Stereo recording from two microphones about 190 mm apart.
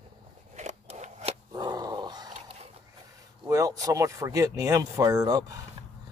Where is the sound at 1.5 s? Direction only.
20° right (ahead or behind).